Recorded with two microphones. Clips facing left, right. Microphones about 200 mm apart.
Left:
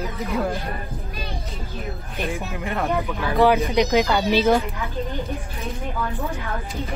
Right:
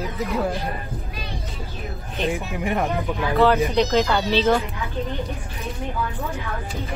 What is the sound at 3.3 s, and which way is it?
Speech, 15° left (ahead or behind).